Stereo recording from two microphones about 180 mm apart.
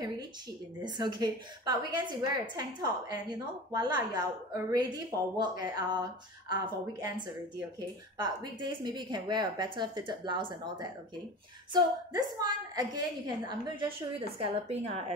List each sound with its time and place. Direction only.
0.8 s a woman's voice: 25° right (ahead or behind)